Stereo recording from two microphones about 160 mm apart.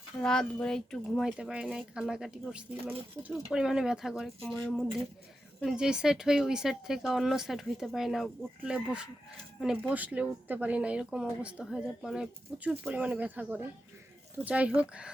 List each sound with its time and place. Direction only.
0.2 s speech: 5° left (ahead or behind)
5.5 s speech: centre (ahead or behind)